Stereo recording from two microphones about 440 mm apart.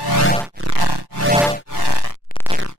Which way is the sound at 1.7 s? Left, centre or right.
Left.